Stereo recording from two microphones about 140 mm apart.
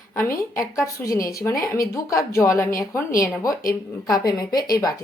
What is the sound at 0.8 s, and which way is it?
A woman's voice, 20° left (ahead or behind).